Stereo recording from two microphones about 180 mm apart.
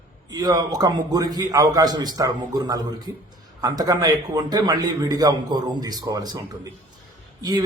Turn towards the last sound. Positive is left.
turn(degrees=-20)  # may be behind; listen again after turning